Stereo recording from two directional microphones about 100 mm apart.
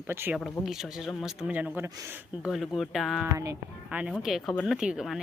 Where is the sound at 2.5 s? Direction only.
Centre (ahead or behind).